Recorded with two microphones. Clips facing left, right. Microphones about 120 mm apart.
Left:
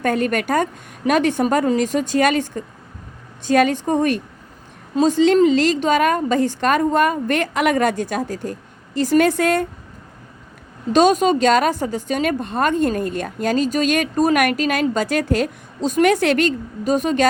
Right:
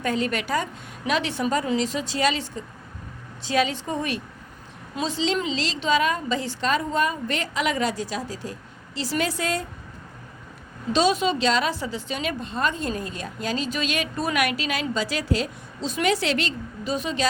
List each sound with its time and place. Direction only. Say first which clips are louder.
0.0 s a woman's voice: left 6 dB; 55° left (ahead or behind)
10.9 s a woman's voice: left 7 dB; 50° left (ahead or behind)